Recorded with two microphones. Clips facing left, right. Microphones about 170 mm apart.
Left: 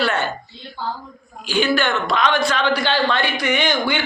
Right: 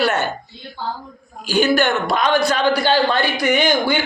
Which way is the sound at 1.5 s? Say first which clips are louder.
Right 3 dB; 40° right (ahead or behind).